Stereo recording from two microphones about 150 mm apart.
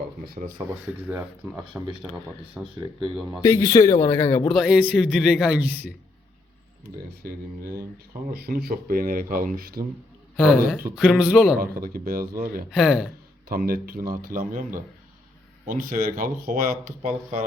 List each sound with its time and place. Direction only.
0.6 s speech: 30° right (ahead or behind)
1.7 s speech: 15° right (ahead or behind)
3.4 s speech: 20° left (ahead or behind)
4.5 s a man's voice: 5° right (ahead or behind)
7.3 s speech: 80° right
10.3 s speech: centre (ahead or behind)
11.6 s speech: 75° right (ahead or behind)
12.7 s a man's voice: 5° right (ahead or behind)
13.5 s speech: 75° right (ahead or behind); by 17.4 s 55° right (ahead or behind)